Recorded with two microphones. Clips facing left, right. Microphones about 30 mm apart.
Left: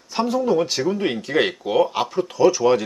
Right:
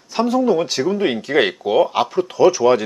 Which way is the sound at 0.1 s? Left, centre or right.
Centre.